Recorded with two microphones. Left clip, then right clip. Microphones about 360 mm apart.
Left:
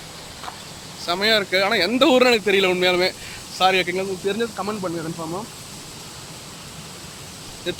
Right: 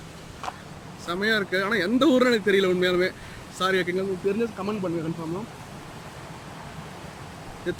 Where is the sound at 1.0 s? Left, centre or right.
Centre.